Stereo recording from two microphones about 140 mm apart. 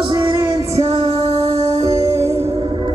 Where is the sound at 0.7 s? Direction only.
50° right (ahead or behind).